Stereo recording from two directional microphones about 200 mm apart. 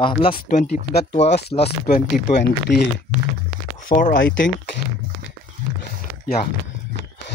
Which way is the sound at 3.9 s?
40° left (ahead or behind).